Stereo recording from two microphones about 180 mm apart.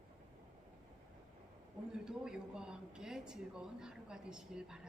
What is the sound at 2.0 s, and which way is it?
Speech, 5° right (ahead or behind).